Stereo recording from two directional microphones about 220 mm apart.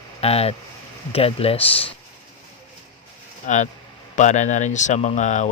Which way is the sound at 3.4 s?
35° left (ahead or behind).